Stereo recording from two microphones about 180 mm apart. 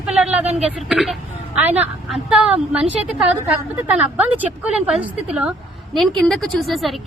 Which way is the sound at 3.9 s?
10° right (ahead or behind).